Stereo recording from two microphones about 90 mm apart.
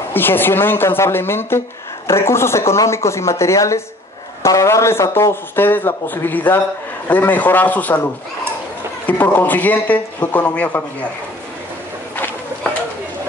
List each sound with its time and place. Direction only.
0.1 s a man's voice: 25° left (ahead or behind)
9.0 s a man's voice: 20° left (ahead or behind)